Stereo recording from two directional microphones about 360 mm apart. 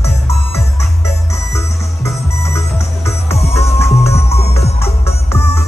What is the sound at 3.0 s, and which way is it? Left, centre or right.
Music, centre.